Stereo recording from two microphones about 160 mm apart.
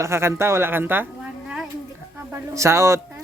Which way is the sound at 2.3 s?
15° right (ahead or behind).